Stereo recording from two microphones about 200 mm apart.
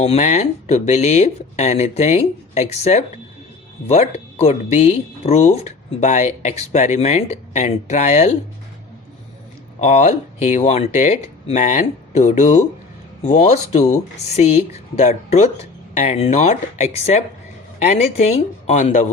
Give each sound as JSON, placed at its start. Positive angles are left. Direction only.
{"t": 0.0, "sound": "speech", "side_deg": 30}
{"t": 4.4, "sound": "speech", "side_deg": 35}
{"t": 9.8, "sound": "speech", "side_deg": 35}